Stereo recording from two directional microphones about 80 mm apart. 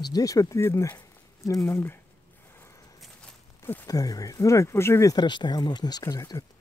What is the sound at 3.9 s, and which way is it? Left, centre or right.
Speech, left.